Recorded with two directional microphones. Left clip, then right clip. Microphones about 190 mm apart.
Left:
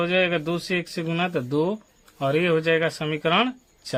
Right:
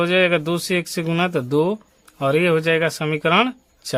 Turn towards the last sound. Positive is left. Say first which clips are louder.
# right 4 dB
turn(degrees=-30)  # may be behind; listen again after turning